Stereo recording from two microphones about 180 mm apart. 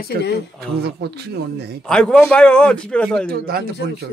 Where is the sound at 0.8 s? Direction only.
65° right (ahead or behind).